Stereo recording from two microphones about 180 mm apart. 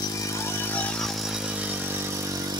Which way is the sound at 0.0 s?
20° left (ahead or behind).